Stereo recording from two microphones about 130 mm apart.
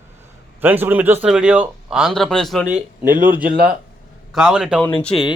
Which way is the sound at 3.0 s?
90° right.